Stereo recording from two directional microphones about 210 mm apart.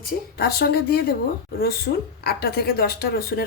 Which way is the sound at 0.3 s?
50° left (ahead or behind).